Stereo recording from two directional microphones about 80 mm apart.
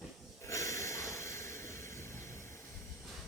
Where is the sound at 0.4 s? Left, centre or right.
Left.